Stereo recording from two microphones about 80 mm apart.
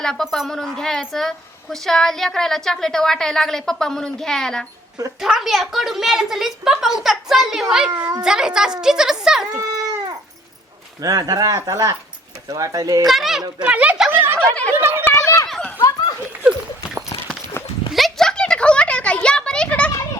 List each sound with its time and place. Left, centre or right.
0.0 s a woman's voice: centre
5.2 s a woman's voice: centre
9.6 s dog: right
11.0 s speech: right
13.1 s a woman's voice: centre
13.6 s a woman's voice: centre
14.3 s a sound: centre
14.7 s a sound: right
15.1 s a sound: left
16.4 s clip-clop: centre
17.6 s horse: left
17.9 s a sound: centre